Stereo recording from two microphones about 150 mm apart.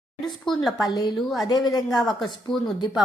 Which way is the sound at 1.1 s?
Centre (ahead or behind).